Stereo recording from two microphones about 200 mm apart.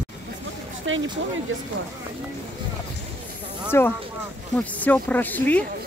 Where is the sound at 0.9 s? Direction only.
75° right (ahead or behind).